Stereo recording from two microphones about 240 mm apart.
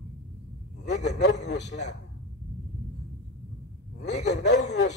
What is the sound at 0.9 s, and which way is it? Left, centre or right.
Speech, left.